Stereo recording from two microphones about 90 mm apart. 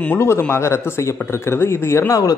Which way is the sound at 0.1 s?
25° left (ahead or behind).